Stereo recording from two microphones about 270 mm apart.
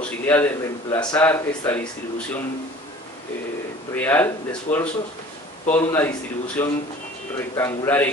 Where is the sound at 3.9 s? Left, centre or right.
Centre.